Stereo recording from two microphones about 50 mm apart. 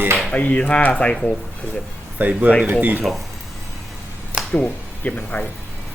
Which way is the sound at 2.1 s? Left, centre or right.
Right.